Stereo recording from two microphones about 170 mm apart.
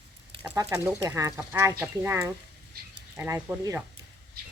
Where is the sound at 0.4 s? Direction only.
20° right (ahead or behind).